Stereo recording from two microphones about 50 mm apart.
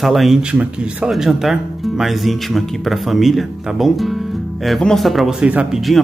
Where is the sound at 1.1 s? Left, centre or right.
Centre.